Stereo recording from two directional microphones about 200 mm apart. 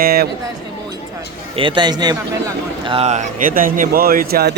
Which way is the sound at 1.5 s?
25° right (ahead or behind).